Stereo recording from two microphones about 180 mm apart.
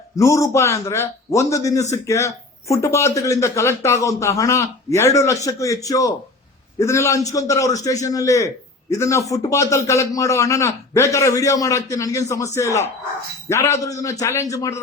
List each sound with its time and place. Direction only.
0.2 s a man's voice: 15° left (ahead or behind)